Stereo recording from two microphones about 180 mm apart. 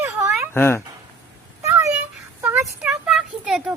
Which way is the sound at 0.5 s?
15° left (ahead or behind).